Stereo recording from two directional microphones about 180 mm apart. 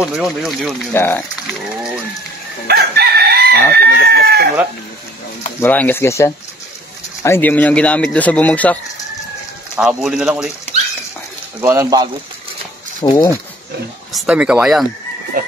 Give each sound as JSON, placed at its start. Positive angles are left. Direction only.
{"t": 0.0, "sound": "speech", "side_deg": -5}
{"t": 0.9, "sound": "speech", "side_deg": 10}
{"t": 2.7, "sound": "crowing", "side_deg": -60}
{"t": 3.7, "sound": "speech", "side_deg": -60}
{"t": 5.6, "sound": "speech", "side_deg": 10}
{"t": 9.8, "sound": "speech", "side_deg": -5}
{"t": 11.6, "sound": "speech", "side_deg": -15}
{"t": 13.0, "sound": "speech", "side_deg": 20}
{"t": 14.1, "sound": "speech", "side_deg": -5}
{"t": 15.4, "sound": "a sound", "side_deg": -55}